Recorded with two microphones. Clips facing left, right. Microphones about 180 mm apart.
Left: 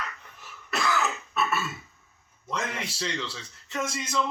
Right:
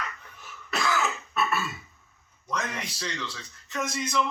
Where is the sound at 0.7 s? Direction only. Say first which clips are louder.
Even; centre (ahead or behind).